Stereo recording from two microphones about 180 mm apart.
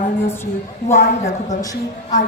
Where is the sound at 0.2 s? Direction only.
15° left (ahead or behind).